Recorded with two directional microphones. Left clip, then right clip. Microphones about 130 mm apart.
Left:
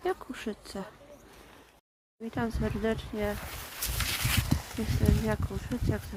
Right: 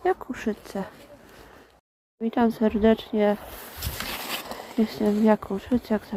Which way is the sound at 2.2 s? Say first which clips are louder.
Right 10 dB; 40° right (ahead or behind).